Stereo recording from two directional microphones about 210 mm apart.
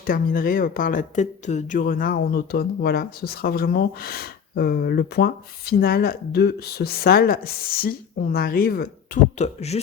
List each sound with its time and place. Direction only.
0.0 s speech: 40° left (ahead or behind)
9.4 s speech: 30° left (ahead or behind)